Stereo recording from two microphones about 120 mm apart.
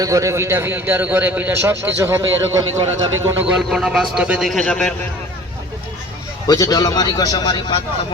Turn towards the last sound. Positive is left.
turn(degrees=40)  # may be behind; listen again after turning